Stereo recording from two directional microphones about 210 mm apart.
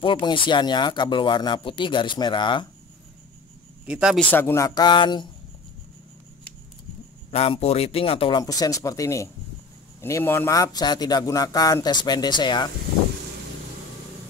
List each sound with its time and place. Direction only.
0.0 s speech: 25° left (ahead or behind)
3.8 s speech: 5° right (ahead or behind)
4.3 s speech: 10° left (ahead or behind)
7.2 s speech: 25° left (ahead or behind)